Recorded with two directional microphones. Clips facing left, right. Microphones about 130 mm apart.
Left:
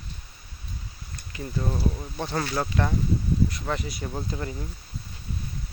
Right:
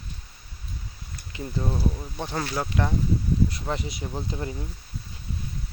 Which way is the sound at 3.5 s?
30° right (ahead or behind).